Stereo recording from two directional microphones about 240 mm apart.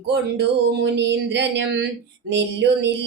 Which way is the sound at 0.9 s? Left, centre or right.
Right.